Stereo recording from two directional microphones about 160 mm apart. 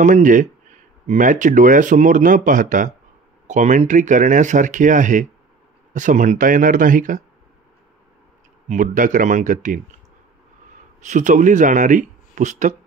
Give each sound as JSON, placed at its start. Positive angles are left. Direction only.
{"t": 0.0, "sound": "speech", "side_deg": -55}
{"t": 8.6, "sound": "speech", "side_deg": -55}
{"t": 11.0, "sound": "speech", "side_deg": -50}